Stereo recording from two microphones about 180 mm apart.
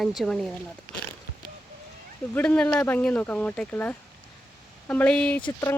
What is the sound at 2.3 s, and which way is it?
Speech, 10° left (ahead or behind).